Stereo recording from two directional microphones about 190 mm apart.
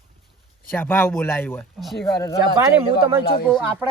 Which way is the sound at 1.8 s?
Centre (ahead or behind).